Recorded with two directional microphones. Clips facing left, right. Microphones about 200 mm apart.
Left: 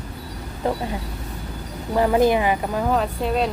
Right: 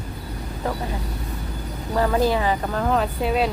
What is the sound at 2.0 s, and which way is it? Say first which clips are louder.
Speech: left 3 dB; 20° left (ahead or behind).